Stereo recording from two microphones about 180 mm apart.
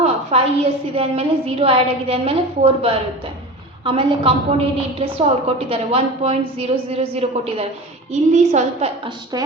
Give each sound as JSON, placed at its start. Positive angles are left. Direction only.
{"t": 0.0, "sound": "a woman's voice", "side_deg": -35}